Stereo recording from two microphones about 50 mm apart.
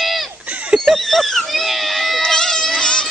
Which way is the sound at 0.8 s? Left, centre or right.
Centre.